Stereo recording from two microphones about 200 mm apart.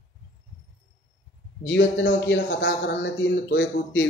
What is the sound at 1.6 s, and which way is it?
Speech, 65° left (ahead or behind).